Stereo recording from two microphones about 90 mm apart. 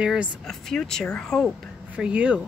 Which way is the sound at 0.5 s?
5° left (ahead or behind).